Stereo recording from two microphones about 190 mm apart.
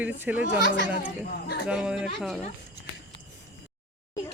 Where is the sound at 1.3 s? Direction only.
55° left (ahead or behind).